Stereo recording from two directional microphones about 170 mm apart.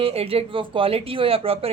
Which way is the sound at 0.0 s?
35° right (ahead or behind).